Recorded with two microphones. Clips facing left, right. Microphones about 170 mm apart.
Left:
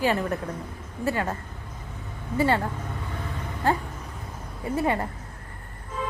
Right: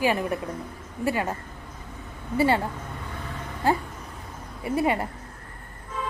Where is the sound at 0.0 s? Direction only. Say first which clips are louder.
Even; 15° right (ahead or behind).